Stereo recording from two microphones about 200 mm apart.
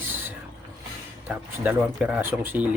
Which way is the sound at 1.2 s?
10° right (ahead or behind).